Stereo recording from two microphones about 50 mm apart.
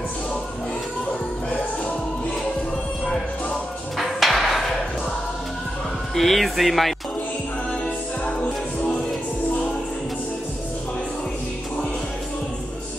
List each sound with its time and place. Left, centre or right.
4.0 s a sound: centre
6.1 s speech: centre
8.4 s music: left